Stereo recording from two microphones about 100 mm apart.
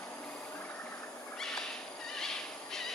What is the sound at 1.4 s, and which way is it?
Owl, 5° left (ahead or behind).